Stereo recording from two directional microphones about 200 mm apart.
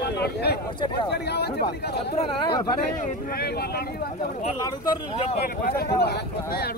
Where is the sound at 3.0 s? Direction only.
50° left (ahead or behind).